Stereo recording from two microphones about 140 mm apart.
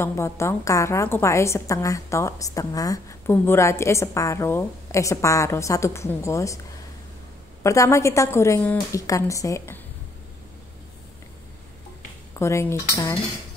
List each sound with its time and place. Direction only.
0.0 s a woman's voice: 20° left (ahead or behind)
7.6 s a woman's voice: 20° left (ahead or behind)
12.4 s a woman's voice: 20° left (ahead or behind)